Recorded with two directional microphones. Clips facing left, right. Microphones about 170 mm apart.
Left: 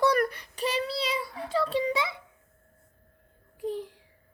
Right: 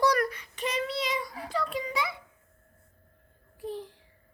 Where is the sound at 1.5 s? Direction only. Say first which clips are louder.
Left 5 dB; 30° left (ahead or behind).